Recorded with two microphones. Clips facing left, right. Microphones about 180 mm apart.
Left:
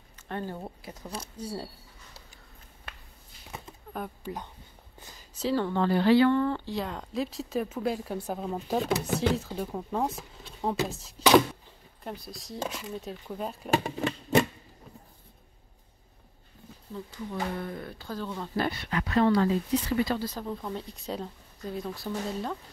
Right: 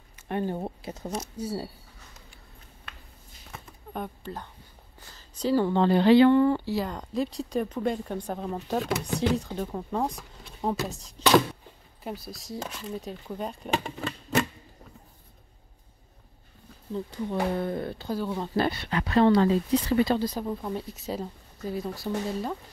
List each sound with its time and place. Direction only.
0.3 s speech: 15° right (ahead or behind)
0.6 s speech: 30° right (ahead or behind)
1.3 s speech: 5° right (ahead or behind)
3.9 s speech: 5° left (ahead or behind)
5.0 s a sound: 10° left (ahead or behind)
5.7 s speech: 25° right (ahead or behind); by 13.7 s centre (ahead or behind)
16.9 s speech: 30° right (ahead or behind)
18.1 s speech: 15° right (ahead or behind)
18.6 s speech: 30° right (ahead or behind)
20.2 s speech: 15° right (ahead or behind)